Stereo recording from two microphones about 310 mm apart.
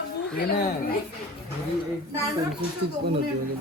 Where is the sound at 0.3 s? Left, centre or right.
Left.